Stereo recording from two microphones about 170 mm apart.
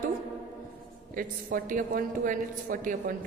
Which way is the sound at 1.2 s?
55° right (ahead or behind).